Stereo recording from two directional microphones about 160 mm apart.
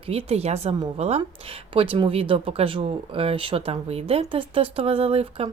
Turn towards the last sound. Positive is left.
turn(degrees=-40)  # may be behind; listen again after turning